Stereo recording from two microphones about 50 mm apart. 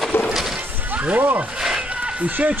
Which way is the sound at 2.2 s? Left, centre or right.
Right.